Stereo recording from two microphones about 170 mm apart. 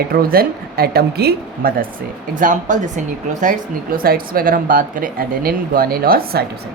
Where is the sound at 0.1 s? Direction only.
60° right (ahead or behind).